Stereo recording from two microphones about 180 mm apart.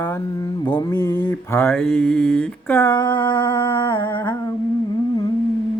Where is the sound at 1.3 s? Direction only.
15° left (ahead or behind).